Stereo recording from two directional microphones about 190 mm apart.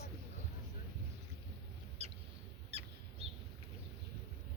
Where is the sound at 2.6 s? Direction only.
30° right (ahead or behind).